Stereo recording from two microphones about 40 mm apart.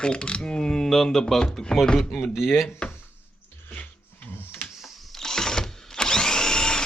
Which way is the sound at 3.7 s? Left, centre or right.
Left.